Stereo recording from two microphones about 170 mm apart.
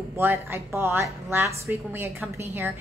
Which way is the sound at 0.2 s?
15° right (ahead or behind).